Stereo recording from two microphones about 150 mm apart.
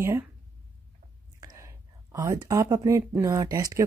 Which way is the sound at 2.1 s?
25° right (ahead or behind).